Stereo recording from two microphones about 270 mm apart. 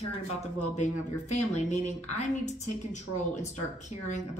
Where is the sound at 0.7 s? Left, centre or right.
Left.